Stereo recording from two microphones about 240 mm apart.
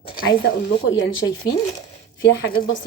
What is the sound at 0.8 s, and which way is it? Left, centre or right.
Speech, left.